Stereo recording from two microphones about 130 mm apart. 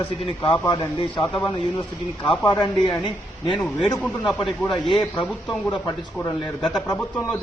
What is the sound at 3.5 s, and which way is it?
Speech, 10° left (ahead or behind).